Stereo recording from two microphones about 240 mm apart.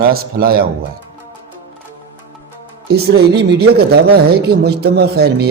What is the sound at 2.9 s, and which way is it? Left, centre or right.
Speech, right.